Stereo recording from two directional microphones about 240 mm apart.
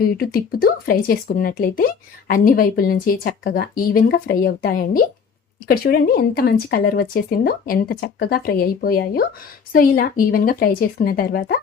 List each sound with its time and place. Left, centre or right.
0.0 s speech: left